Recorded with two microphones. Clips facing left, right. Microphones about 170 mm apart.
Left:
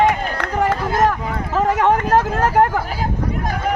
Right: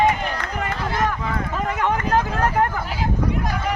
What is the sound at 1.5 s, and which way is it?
Speech, 80° left.